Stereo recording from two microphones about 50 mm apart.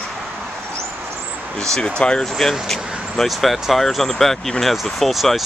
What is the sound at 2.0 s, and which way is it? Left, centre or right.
Speech, centre.